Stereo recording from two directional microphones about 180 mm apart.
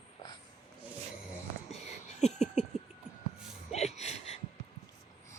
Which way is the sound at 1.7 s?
35° left (ahead or behind).